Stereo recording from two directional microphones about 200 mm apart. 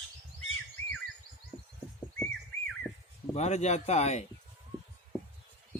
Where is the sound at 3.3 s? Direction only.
35° left (ahead or behind).